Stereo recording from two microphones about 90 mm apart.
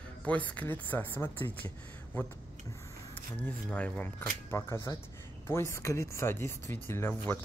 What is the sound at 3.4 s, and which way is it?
Speech, 15° left (ahead or behind).